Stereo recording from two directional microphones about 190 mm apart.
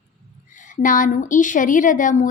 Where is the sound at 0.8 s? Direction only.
45° left (ahead or behind).